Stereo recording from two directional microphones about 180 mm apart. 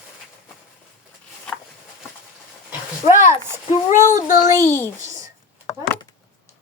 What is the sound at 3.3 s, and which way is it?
Speech, 20° left (ahead or behind).